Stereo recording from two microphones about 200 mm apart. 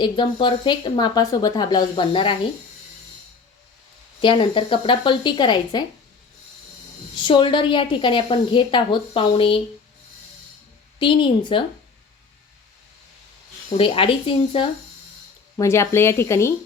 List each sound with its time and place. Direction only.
0.0 s speech: 25° left (ahead or behind)
4.2 s speech: 25° left (ahead or behind)
7.3 s speech: 25° left (ahead or behind)
11.0 s speech: 25° left (ahead or behind)
13.7 s speech: 25° left (ahead or behind)
15.5 s speech: 15° left (ahead or behind)